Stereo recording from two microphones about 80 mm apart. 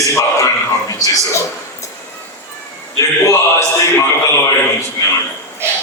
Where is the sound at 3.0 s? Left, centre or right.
Left.